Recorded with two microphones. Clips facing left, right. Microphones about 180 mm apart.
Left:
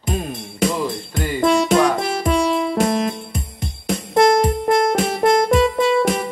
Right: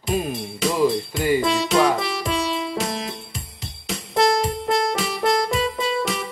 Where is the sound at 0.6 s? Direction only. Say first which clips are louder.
Right 1 dB; 50° left (ahead or behind).